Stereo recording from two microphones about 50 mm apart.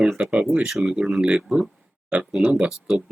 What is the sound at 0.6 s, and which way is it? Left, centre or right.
Speech, centre.